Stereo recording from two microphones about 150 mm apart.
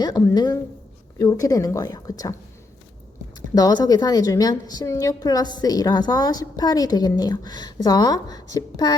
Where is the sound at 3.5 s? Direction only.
25° left (ahead or behind).